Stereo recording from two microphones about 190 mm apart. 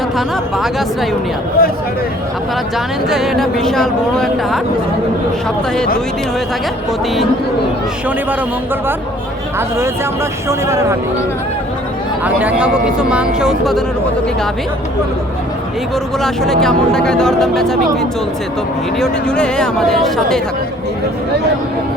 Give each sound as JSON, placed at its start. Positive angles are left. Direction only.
{"t": 0.2, "sound": "speech", "side_deg": 0}
{"t": 1.6, "sound": "speech", "side_deg": 55}
{"t": 2.7, "sound": "speech", "side_deg": 0}
{"t": 9.6, "sound": "speech", "side_deg": -15}
{"t": 12.2, "sound": "speech", "side_deg": -10}
{"t": 16.2, "sound": "speech", "side_deg": 0}
{"t": 18.9, "sound": "speech", "side_deg": 5}